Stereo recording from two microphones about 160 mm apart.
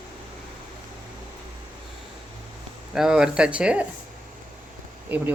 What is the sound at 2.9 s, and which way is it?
Speech, 5° right (ahead or behind).